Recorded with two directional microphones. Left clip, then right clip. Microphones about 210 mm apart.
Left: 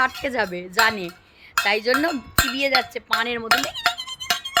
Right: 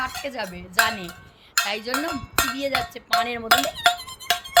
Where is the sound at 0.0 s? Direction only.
15° left (ahead or behind).